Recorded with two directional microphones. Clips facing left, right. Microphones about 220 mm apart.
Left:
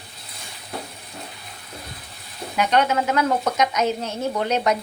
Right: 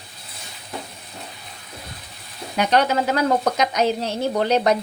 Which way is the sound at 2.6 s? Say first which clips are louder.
Right 1 dB; 35° right (ahead or behind).